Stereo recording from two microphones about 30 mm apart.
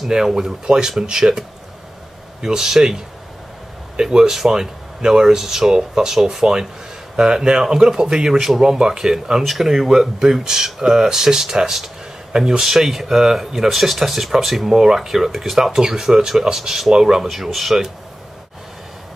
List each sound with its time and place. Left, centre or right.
0.1 s speech: right
2.4 s speech: centre
4.0 s speech: centre
8.3 s speech: centre
9.4 s speech: centre
9.7 s speech: centre